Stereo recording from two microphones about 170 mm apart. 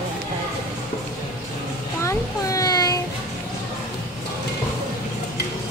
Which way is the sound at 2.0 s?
20° left (ahead or behind).